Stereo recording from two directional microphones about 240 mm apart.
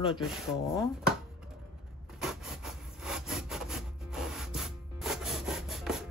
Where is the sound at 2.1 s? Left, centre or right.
Centre.